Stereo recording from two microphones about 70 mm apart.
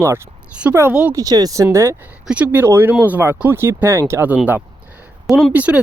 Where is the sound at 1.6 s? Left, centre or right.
Right.